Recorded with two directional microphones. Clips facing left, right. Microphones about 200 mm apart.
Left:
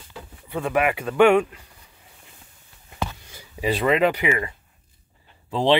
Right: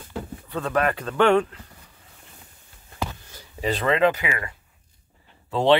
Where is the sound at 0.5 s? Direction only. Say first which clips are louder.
Left 2 dB; 10° left (ahead or behind).